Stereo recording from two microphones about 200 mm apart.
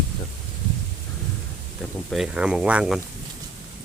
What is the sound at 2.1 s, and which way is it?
Speech, 5° right (ahead or behind).